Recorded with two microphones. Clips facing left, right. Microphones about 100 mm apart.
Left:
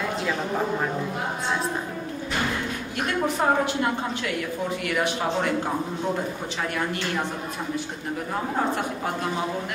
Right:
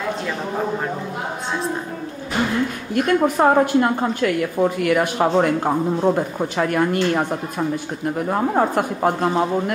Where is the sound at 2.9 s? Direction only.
50° right (ahead or behind).